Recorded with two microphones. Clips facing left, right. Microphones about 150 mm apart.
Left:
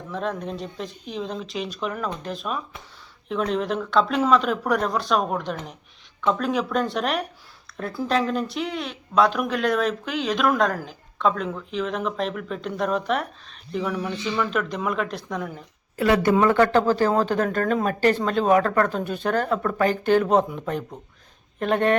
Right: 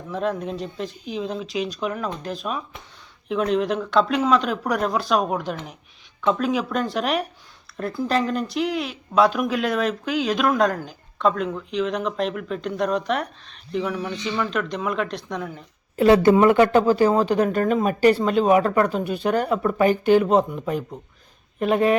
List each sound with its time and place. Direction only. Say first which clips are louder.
0.1 s speech: right 3 dB; centre (ahead or behind)
16.0 s speech: right 5 dB; 25° right (ahead or behind)
16.4 s speech: right 3 dB; 15° right (ahead or behind)